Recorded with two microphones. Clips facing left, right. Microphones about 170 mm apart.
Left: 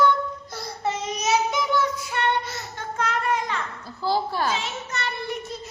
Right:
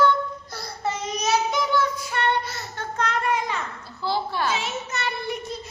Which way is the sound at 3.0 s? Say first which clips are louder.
Right 1 dB; 5° left (ahead or behind).